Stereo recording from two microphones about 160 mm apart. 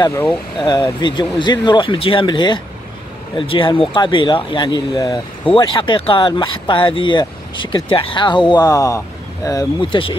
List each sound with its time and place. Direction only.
0.0 s speech: 15° left (ahead or behind)
0.7 s speech: 25° left (ahead or behind)